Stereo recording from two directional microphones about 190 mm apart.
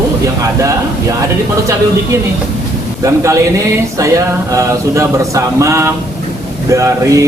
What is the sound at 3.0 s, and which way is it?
Speech, 15° right (ahead or behind).